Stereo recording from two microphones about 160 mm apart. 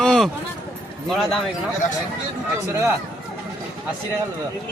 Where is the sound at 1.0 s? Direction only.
Centre (ahead or behind).